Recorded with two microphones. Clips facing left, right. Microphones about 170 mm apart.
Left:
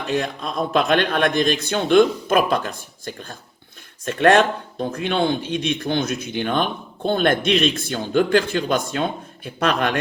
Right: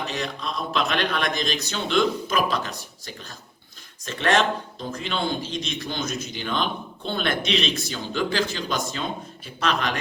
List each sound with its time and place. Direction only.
0.1 s a man's voice: 50° left (ahead or behind)